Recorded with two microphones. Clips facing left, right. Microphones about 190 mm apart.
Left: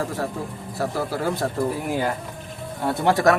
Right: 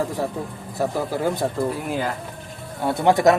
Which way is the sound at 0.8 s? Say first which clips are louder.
Right 2 dB; 15° right (ahead or behind).